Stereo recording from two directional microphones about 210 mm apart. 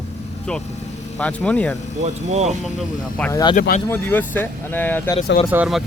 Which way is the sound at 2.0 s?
30° right (ahead or behind).